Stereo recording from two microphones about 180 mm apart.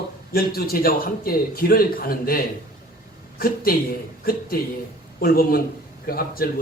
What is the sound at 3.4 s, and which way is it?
Speech, 55° left (ahead or behind).